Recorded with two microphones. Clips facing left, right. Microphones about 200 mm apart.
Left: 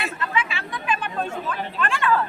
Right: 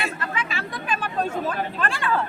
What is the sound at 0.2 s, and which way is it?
Chatter, 40° right (ahead or behind).